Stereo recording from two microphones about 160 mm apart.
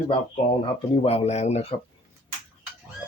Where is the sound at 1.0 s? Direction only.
40° left (ahead or behind).